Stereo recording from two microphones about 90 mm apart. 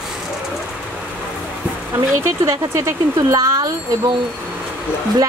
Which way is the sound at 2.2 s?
30° right (ahead or behind).